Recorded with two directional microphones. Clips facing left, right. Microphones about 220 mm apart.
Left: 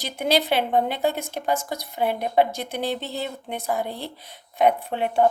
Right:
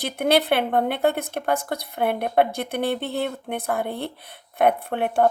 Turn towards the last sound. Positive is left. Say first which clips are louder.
# even
turn(degrees=-55)  # may be behind; listen again after turning